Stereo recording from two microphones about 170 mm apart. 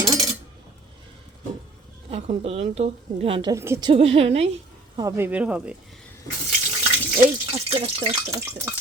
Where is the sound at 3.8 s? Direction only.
35° right (ahead or behind).